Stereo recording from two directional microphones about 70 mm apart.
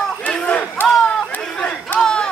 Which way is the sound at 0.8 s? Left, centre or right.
Left.